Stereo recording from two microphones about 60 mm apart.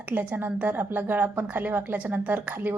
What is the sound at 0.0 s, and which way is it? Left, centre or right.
A woman's voice, right.